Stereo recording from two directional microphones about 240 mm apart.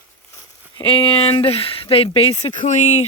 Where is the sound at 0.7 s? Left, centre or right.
Left.